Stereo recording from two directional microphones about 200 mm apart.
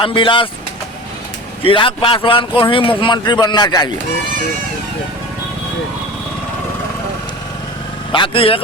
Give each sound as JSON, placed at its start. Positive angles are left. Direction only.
{"t": 0.0, "sound": "a man's voice", "side_deg": 25}
{"t": 1.6, "sound": "a man's voice", "side_deg": 25}
{"t": 8.1, "sound": "a man's voice", "side_deg": 25}